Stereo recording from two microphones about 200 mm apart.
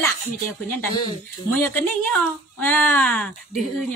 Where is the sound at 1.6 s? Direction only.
10° left (ahead or behind).